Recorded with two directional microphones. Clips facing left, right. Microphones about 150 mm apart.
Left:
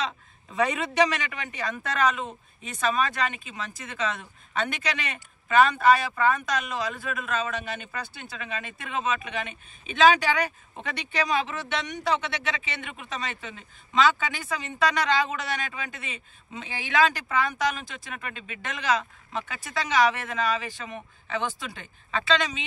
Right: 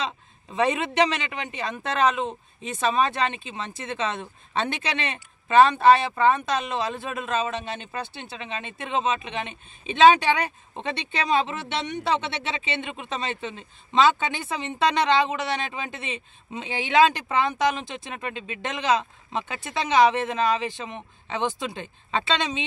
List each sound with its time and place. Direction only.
0.0 s a man's voice: 25° right (ahead or behind)